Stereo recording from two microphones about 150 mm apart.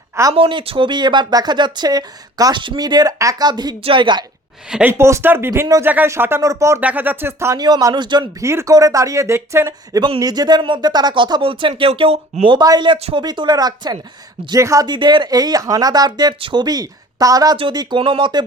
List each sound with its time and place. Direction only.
0.3 s speech: 35° right (ahead or behind)
4.7 s speech: 10° right (ahead or behind); by 8.2 s 30° right (ahead or behind)
8.4 s speech: 20° right (ahead or behind); by 12.5 s 40° right (ahead or behind)
12.5 s speech: 25° right (ahead or behind)